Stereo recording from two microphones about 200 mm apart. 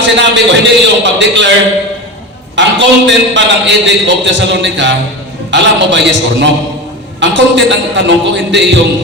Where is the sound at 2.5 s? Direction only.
65° right (ahead or behind).